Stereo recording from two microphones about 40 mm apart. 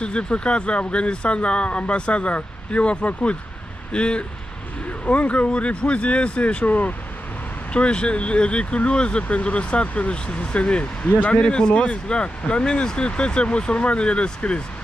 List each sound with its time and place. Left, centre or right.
0.0 s speech: left
7.7 s speech: left
11.1 s speech: left
11.3 s speech: left